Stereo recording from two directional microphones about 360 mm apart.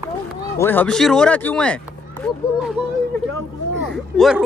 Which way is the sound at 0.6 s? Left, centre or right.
Centre.